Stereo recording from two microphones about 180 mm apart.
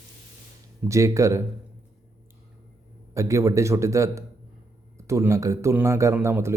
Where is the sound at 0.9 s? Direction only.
15° right (ahead or behind).